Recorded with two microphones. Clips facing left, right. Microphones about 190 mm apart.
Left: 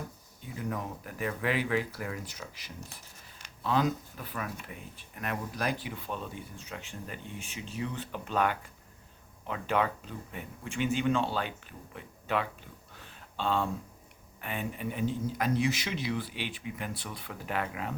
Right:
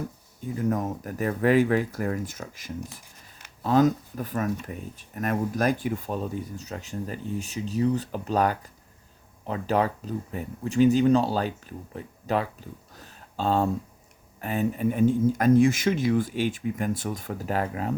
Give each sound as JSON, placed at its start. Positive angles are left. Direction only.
{"t": 0.5, "sound": "speech", "side_deg": -45}
{"t": 13.0, "sound": "a sound", "side_deg": -40}
{"t": 14.4, "sound": "speech", "side_deg": -40}